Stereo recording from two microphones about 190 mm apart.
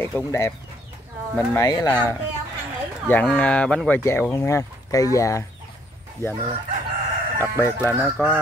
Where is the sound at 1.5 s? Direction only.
15° left (ahead or behind).